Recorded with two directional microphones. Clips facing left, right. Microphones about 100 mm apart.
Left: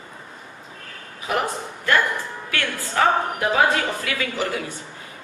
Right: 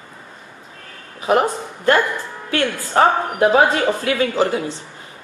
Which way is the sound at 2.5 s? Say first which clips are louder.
Right 8 dB; 35° right (ahead or behind).